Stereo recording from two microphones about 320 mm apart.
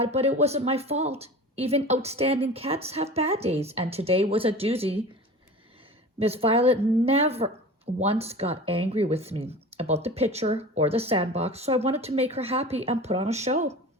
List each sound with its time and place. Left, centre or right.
0.0 s speech: centre
6.1 s speech: centre